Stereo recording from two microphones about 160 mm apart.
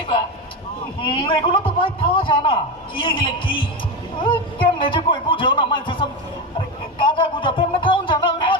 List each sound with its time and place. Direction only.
1.0 s a man's voice: 30° left (ahead or behind)
4.8 s a man's voice: 30° left (ahead or behind)
7.0 s music: 30° left (ahead or behind)